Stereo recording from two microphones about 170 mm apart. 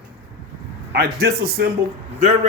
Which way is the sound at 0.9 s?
70° right (ahead or behind).